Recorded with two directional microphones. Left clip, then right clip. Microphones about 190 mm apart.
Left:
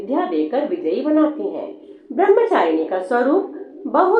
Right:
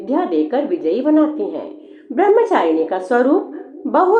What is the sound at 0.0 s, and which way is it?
A woman's voice, 45° right (ahead or behind).